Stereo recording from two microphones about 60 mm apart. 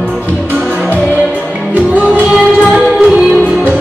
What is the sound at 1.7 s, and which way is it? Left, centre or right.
Music, right.